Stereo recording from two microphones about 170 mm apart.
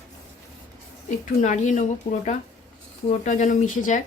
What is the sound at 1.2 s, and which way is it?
Speech, 45° left (ahead or behind).